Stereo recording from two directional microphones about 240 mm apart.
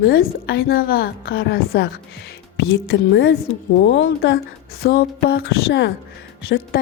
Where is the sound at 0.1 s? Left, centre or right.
Left.